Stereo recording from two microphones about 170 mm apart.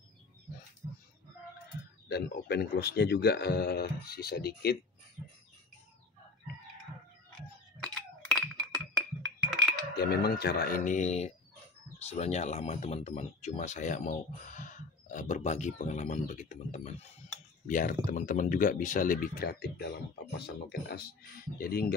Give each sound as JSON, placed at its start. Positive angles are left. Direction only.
{"t": 2.0, "sound": "a man's voice", "side_deg": 70}
{"t": 7.8, "sound": "chink", "side_deg": 5}
{"t": 9.9, "sound": "speech", "side_deg": 70}
{"t": 21.5, "sound": "speech", "side_deg": 65}